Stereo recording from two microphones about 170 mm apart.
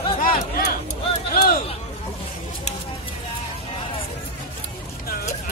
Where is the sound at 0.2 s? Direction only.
55° left (ahead or behind).